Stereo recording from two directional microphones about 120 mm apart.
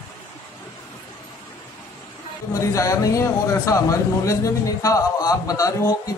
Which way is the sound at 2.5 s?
25° left (ahead or behind).